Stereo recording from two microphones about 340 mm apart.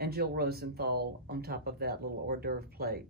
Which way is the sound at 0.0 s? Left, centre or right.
Right.